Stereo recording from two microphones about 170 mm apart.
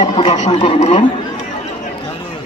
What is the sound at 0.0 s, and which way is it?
Speech, 45° left (ahead or behind).